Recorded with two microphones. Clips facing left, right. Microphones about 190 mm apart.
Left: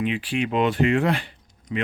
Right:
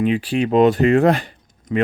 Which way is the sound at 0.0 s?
40° right (ahead or behind).